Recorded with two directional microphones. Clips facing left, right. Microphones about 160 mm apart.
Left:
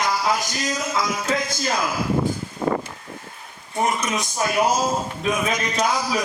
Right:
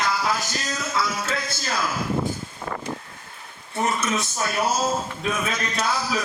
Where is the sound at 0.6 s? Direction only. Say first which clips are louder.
Left 3 dB; 15° left (ahead or behind).